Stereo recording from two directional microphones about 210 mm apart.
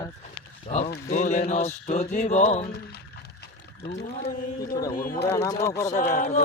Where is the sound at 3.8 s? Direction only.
50° left (ahead or behind).